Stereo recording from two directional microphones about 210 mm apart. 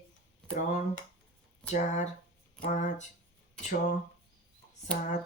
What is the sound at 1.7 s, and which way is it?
Speech, 35° left (ahead or behind).